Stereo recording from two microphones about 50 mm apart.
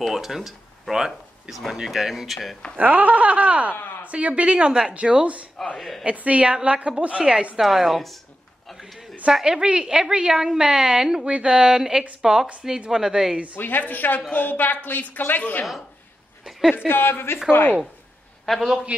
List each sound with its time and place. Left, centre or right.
0.0 s a woman's voice: centre
2.8 s speech: right
5.8 s a woman's voice: centre
6.0 s a woman's voice: right
7.5 s a woman's voice: centre
8.6 s a sound: centre
9.3 s a woman's voice: centre
13.6 s a woman's voice: left
16.7 s speech: left
18.4 s a sound: centre
18.7 s a woman's voice: centre